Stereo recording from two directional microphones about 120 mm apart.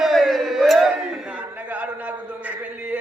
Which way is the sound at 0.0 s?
Centre (ahead or behind).